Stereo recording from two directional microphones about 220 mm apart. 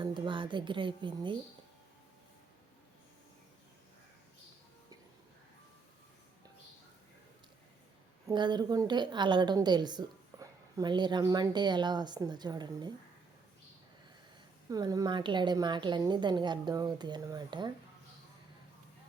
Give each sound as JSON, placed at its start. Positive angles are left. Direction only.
{"t": 0.0, "sound": "a woman's voice", "side_deg": -20}
{"t": 8.3, "sound": "a woman's voice", "side_deg": -20}
{"t": 14.7, "sound": "a woman's voice", "side_deg": -15}